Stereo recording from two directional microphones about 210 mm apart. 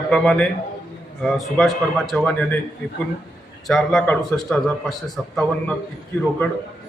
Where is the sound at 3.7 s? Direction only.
Centre (ahead or behind).